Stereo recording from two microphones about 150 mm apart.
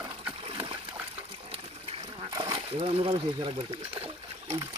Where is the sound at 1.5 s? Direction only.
35° right (ahead or behind).